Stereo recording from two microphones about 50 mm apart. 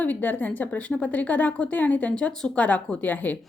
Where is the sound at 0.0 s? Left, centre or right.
Left.